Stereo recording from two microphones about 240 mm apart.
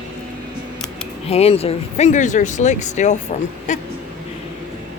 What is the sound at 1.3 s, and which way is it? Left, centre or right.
Speech, left.